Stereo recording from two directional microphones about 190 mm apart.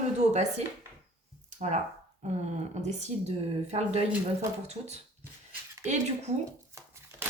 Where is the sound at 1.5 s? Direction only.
40° right (ahead or behind).